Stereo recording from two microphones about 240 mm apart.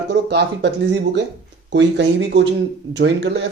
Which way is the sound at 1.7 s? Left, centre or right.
Right.